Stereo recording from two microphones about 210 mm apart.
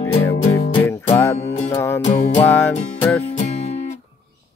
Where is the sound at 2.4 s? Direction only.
10° left (ahead or behind).